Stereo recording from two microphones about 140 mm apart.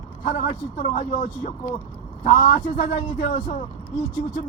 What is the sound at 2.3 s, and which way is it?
Speech, 45° left (ahead or behind).